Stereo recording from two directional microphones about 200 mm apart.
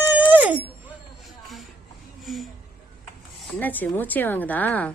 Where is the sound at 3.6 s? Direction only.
10° left (ahead or behind).